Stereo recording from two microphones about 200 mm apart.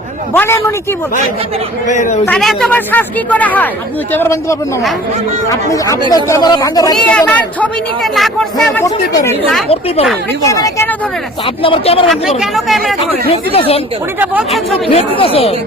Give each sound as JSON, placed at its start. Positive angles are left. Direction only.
{"t": 0.3, "sound": "speech", "side_deg": 10}
{"t": 1.9, "sound": "speech", "side_deg": 35}
{"t": 2.2, "sound": "speech", "side_deg": 5}
{"t": 7.1, "sound": "speech", "side_deg": 5}
{"t": 9.6, "sound": "speech", "side_deg": 30}
{"t": 10.5, "sound": "speech", "side_deg": 15}
{"t": 11.4, "sound": "speech", "side_deg": 25}
{"t": 12.4, "sound": "speech", "side_deg": 0}
{"t": 13.2, "sound": "speech", "side_deg": 30}
{"t": 14.2, "sound": "speech", "side_deg": -5}
{"t": 14.8, "sound": "speech", "side_deg": 30}